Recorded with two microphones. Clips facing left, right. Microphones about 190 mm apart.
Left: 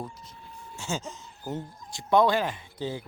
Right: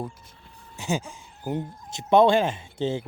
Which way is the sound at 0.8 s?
15° right (ahead or behind).